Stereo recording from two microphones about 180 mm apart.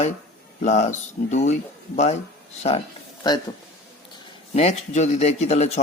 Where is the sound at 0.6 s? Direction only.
40° left (ahead or behind).